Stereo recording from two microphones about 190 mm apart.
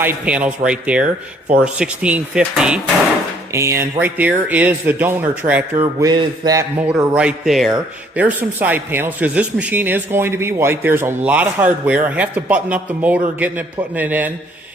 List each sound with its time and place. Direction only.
0.0 s speech: 10° right (ahead or behind)
7.1 s speech: 5° right (ahead or behind)